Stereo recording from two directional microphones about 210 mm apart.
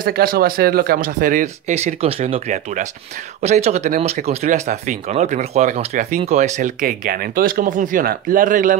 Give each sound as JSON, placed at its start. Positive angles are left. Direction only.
{"t": 0.0, "sound": "speech", "side_deg": -45}